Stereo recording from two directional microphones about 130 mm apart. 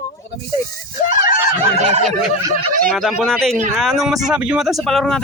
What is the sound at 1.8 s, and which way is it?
Fowl, 55° right (ahead or behind).